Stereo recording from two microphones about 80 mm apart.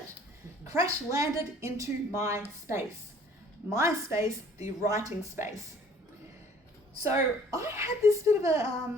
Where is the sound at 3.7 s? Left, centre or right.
Right.